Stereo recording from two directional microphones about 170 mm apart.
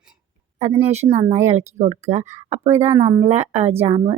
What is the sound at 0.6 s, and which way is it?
Speech, 40° right (ahead or behind).